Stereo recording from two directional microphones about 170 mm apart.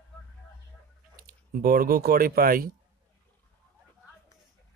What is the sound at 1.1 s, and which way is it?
Speech, 55° right (ahead or behind).